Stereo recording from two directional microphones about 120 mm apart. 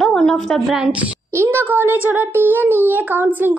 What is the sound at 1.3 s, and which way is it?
Speech, 20° right (ahead or behind).